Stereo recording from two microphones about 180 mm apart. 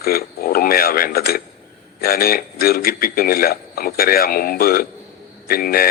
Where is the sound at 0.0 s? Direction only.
55° left (ahead or behind).